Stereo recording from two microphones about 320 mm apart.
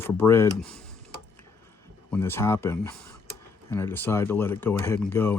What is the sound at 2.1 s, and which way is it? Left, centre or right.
Speech, centre.